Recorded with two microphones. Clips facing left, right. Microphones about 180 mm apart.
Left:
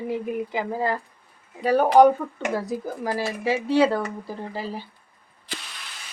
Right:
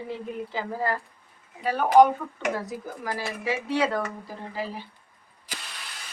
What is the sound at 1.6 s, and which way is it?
Speech, 40° left (ahead or behind).